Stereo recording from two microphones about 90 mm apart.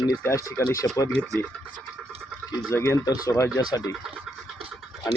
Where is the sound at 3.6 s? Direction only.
45° left (ahead or behind).